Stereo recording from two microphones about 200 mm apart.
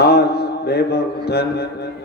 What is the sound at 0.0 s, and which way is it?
Mantra, 55° left (ahead or behind).